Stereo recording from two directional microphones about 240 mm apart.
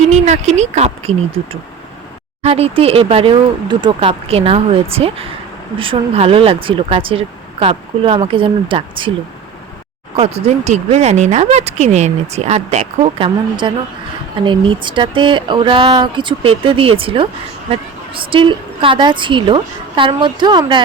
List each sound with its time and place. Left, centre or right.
0.1 s speech: right
2.4 s speech: right
10.2 s speech: right